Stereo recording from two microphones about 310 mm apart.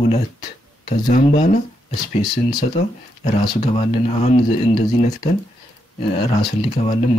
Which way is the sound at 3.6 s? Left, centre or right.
Centre.